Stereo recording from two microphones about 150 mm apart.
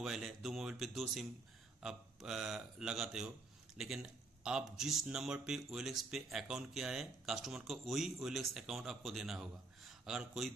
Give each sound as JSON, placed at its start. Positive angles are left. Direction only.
{"t": 0.0, "sound": "a man's voice", "side_deg": -5}